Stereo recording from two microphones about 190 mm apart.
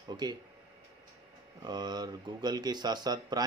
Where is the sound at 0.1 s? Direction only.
20° right (ahead or behind).